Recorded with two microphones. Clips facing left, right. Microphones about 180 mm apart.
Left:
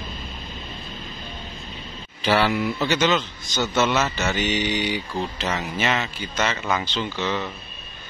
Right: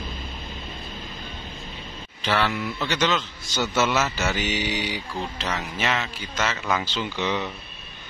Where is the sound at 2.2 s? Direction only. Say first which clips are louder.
Left 4 dB; 5° left (ahead or behind).